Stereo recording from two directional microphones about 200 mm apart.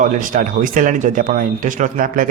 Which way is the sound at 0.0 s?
40° right (ahead or behind).